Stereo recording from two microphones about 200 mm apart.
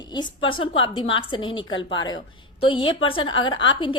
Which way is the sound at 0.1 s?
25° left (ahead or behind).